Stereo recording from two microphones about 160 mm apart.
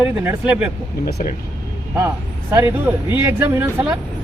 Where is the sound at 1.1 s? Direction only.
75° left (ahead or behind).